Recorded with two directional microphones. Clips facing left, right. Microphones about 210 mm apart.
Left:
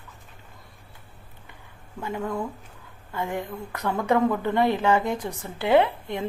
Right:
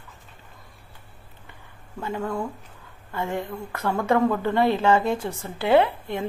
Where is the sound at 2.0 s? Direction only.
20° left (ahead or behind).